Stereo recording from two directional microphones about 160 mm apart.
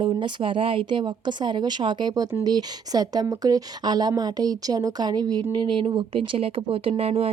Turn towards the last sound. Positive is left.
turn(degrees=-35)  # may be behind; listen again after turning